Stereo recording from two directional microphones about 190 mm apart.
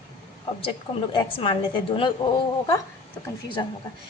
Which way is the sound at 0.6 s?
30° left (ahead or behind).